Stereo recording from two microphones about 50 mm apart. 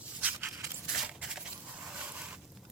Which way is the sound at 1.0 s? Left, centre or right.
Centre.